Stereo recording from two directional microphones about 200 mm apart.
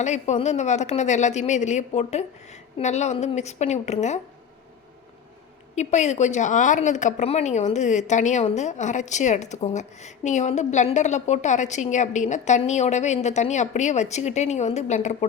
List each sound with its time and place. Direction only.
0.0 s a woman's voice: 35° left (ahead or behind)
5.7 s a woman's voice: 35° left (ahead or behind)